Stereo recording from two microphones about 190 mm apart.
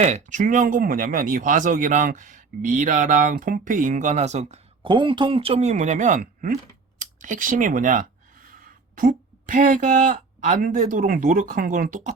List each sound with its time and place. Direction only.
0.0 s speech: 40° right (ahead or behind)
7.0 s a sound: 45° right (ahead or behind)
9.0 s speech: 45° right (ahead or behind)